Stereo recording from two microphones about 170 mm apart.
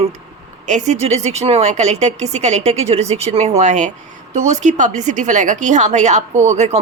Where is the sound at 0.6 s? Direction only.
45° right (ahead or behind).